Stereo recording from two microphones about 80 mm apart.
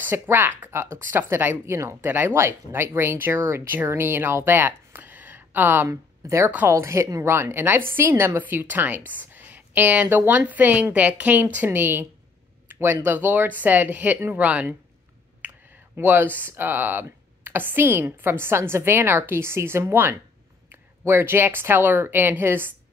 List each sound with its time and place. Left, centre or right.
0.1 s a woman's voice: right
5.9 s a woman's voice: right; by 14.8 s centre
16.0 s a woman's voice: right